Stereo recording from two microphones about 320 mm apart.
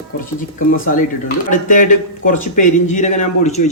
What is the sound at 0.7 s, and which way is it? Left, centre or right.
A man's voice, left.